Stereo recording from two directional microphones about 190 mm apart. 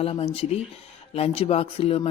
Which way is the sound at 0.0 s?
30° left (ahead or behind).